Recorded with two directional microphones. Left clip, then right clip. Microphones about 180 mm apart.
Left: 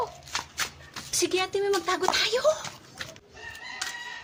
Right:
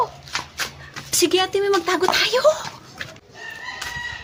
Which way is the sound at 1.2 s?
15° right (ahead or behind).